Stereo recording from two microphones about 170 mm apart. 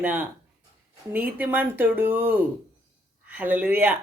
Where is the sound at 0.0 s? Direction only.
10° right (ahead or behind).